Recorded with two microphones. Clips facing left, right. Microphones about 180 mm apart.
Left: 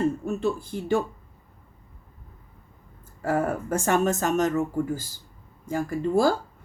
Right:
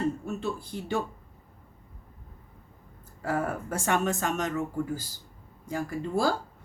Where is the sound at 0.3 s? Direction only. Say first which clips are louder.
Left 6 dB; 50° left (ahead or behind).